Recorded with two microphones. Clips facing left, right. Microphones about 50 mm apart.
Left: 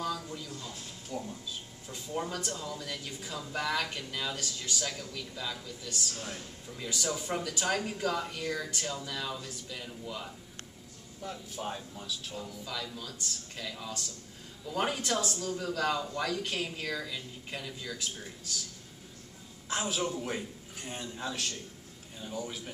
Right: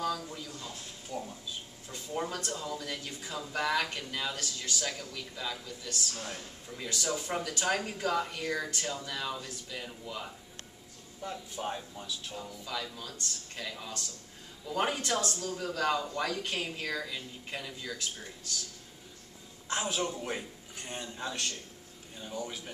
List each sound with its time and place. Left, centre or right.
0.0 s a sound: centre
0.6 s a man's voice: centre
19.7 s a man's voice: centre